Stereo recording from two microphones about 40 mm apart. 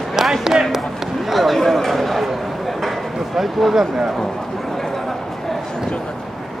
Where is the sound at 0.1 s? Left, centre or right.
Centre.